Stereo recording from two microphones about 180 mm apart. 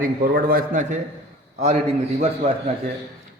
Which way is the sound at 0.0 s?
55° right (ahead or behind).